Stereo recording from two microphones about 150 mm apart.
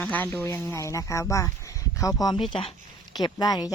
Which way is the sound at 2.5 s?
35° left (ahead or behind).